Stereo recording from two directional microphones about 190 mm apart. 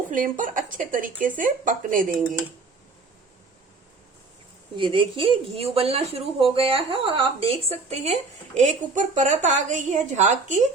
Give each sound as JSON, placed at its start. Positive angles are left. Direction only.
{"t": 0.1, "sound": "speech", "side_deg": -45}
{"t": 4.8, "sound": "speech", "side_deg": -25}